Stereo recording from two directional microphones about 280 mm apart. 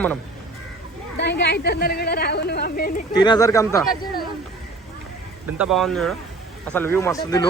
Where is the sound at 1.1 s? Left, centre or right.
Left.